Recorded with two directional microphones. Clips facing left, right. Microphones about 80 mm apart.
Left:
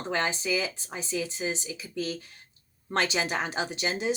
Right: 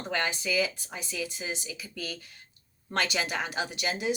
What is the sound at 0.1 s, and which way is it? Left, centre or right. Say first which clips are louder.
Speech: left 2 dB; left.